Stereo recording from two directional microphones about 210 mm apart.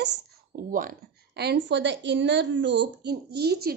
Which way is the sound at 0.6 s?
40° right (ahead or behind).